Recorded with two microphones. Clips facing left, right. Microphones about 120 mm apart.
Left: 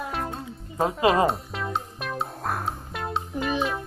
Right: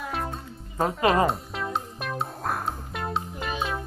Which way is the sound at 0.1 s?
Centre (ahead or behind).